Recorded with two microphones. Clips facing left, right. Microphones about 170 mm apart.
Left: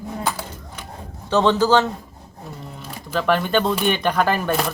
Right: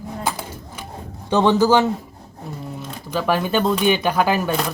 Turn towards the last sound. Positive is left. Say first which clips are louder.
# left 1 dB
turn(degrees=0)  # may be behind; listen again after turning